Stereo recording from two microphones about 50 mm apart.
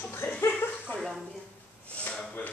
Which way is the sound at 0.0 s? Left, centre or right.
Left.